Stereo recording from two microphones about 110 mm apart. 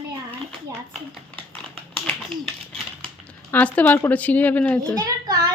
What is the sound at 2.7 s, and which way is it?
Speech, 10° left (ahead or behind).